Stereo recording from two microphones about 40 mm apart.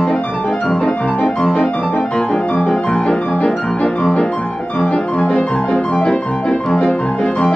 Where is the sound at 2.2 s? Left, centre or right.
Centre.